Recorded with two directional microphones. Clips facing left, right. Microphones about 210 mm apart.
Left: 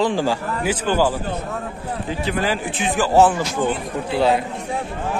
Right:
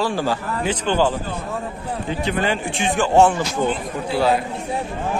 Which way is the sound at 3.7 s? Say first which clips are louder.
Even; 20° left (ahead or behind).